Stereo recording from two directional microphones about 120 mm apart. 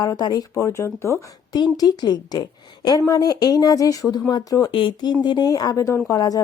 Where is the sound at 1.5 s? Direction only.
35° left (ahead or behind).